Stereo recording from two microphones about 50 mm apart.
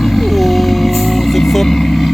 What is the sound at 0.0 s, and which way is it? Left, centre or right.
Vehicle, centre.